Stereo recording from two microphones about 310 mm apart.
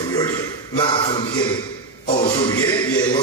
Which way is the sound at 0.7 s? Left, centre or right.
Centre.